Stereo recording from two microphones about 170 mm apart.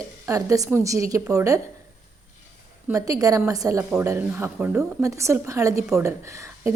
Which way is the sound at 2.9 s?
20° right (ahead or behind).